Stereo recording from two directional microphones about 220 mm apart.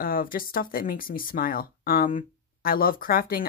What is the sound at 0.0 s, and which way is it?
Speech, 40° left (ahead or behind).